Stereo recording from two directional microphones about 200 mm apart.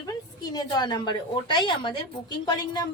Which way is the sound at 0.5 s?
20° left (ahead or behind).